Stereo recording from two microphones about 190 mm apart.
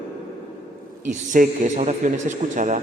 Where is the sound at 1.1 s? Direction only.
40° right (ahead or behind).